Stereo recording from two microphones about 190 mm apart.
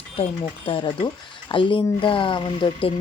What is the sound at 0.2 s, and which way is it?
Speech, 25° left (ahead or behind).